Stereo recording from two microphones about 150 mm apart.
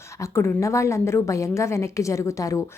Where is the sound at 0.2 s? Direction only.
20° left (ahead or behind).